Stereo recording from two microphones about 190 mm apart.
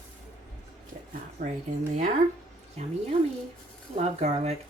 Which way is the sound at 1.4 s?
40° right (ahead or behind).